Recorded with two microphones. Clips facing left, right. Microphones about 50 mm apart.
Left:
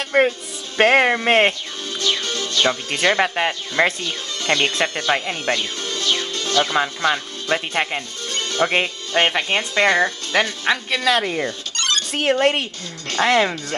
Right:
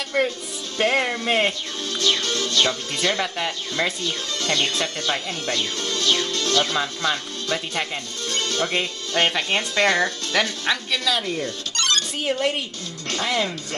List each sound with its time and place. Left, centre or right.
0.1 s speech: left
1.9 s speech: left
11.1 s speech: left
11.7 s music: left
12.1 s speech: left